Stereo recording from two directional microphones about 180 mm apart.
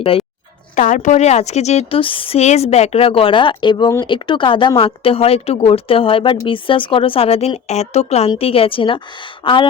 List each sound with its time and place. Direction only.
0.8 s a woman's voice: 45° left (ahead or behind); by 9.6 s 25° left (ahead or behind)